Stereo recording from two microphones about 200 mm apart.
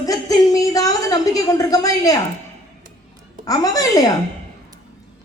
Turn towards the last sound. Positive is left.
turn(degrees=15)  # may be behind; listen again after turning